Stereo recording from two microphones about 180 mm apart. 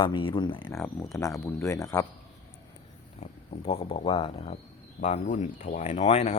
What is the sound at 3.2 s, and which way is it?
Speech, 35° left (ahead or behind).